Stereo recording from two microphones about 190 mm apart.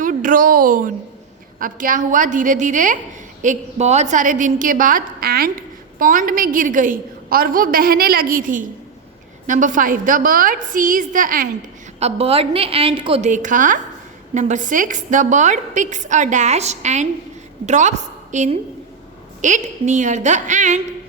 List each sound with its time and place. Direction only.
0.0 s a woman's voice: 45° right (ahead or behind)
11.9 s a woman's voice: 30° right (ahead or behind)